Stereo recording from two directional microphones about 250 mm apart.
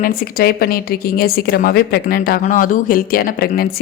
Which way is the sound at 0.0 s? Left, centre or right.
Left.